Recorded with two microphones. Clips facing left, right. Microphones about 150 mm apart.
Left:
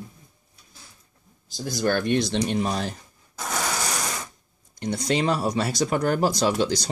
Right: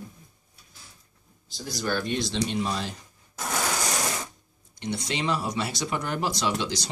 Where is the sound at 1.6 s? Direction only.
55° left (ahead or behind).